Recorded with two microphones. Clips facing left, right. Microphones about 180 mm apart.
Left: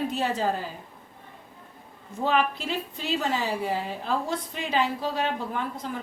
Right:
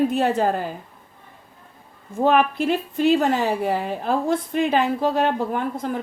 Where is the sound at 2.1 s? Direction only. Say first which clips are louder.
Right 7 dB; 55° right (ahead or behind).